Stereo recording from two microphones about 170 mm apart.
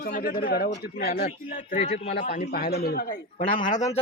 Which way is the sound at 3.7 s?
45° left (ahead or behind).